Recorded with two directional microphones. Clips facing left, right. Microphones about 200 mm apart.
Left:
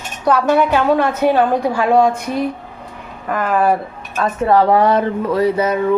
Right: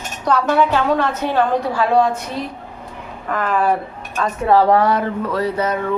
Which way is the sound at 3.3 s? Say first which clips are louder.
Left 2 dB; 10° left (ahead or behind).